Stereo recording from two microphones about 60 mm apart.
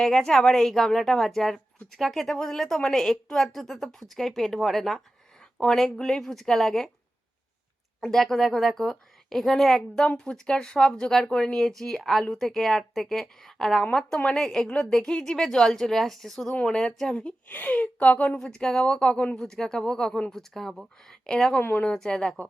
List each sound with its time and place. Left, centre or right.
0.0 s a woman's voice: centre
8.0 s a woman's voice: centre
10.0 s a woman's voice: centre
17.5 s a woman's voice: left
18.3 s a woman's voice: centre
21.6 s speech: left
21.8 s a woman's voice: centre